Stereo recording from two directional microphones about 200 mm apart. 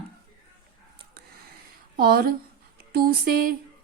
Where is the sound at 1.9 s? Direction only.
50° right (ahead or behind).